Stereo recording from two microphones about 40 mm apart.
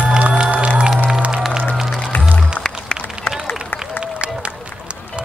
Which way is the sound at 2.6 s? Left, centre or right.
Left.